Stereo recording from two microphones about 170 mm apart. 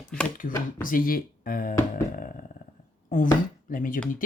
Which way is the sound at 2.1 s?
55° left (ahead or behind).